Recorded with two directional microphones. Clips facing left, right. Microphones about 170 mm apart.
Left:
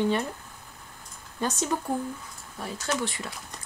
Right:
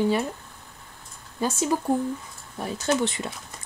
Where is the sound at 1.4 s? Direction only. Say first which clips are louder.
Right 4 dB; 5° right (ahead or behind).